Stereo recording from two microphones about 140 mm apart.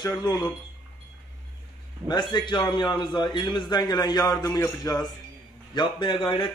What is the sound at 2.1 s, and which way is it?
A man's voice, 30° left (ahead or behind).